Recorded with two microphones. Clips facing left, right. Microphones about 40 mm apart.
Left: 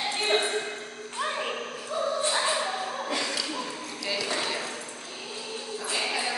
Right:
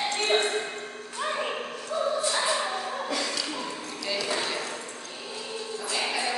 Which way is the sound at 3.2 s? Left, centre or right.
Centre.